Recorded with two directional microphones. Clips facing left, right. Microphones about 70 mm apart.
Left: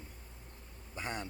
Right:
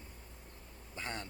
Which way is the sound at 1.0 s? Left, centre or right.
Centre.